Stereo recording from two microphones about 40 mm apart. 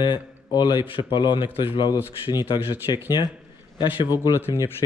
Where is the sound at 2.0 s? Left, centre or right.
Right.